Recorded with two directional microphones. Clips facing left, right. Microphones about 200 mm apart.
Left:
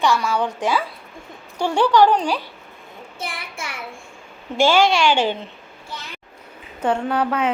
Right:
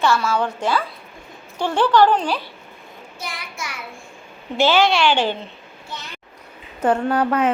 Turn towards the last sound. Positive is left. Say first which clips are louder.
# right 2 dB
turn(degrees=-5)  # may be behind; listen again after turning